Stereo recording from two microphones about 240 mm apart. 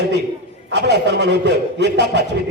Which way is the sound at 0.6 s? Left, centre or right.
Right.